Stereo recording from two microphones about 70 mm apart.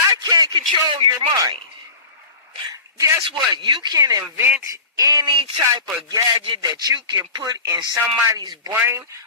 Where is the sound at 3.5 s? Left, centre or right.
Right.